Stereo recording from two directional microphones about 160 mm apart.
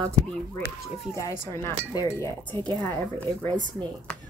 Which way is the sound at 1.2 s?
20° left (ahead or behind).